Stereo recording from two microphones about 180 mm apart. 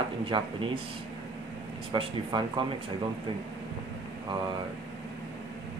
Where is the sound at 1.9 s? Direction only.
25° right (ahead or behind).